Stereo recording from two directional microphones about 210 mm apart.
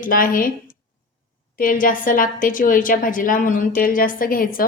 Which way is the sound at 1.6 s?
40° left (ahead or behind).